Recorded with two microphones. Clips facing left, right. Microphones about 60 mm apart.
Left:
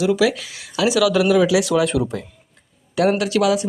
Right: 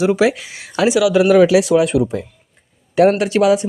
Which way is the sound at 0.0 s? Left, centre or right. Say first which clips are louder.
Right 3 dB; right.